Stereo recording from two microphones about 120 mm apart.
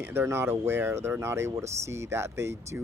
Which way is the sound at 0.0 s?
20° right (ahead or behind).